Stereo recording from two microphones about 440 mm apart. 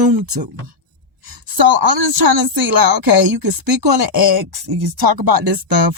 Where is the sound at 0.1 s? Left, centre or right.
Right.